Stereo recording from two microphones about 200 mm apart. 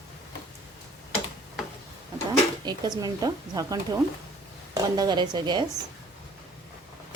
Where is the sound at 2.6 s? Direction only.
20° right (ahead or behind).